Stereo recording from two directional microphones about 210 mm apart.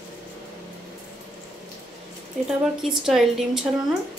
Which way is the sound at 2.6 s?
Centre (ahead or behind).